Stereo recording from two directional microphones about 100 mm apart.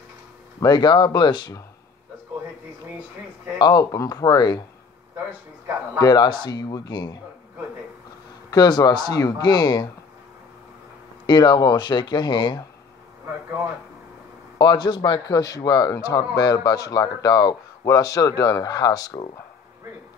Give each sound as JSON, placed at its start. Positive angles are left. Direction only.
{"t": 0.6, "sound": "speech", "side_deg": 45}
{"t": 3.5, "sound": "speech", "side_deg": 45}
{"t": 5.9, "sound": "speech", "side_deg": 45}
{"t": 8.5, "sound": "speech", "side_deg": 45}
{"t": 11.2, "sound": "speech", "side_deg": 50}
{"t": 14.6, "sound": "speech", "side_deg": 45}